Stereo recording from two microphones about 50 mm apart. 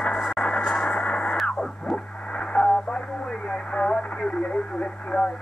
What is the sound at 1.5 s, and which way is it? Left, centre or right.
Radio, centre.